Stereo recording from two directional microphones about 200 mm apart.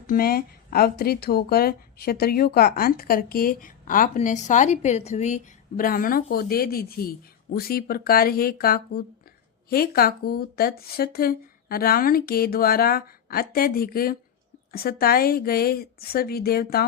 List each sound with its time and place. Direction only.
0.1 s speech: 50° left (ahead or behind)